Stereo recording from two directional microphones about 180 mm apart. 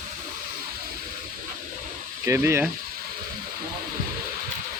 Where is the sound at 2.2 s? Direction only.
15° right (ahead or behind).